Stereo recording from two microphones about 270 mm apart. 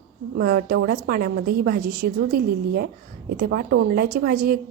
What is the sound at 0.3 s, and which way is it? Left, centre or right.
A woman's voice, right.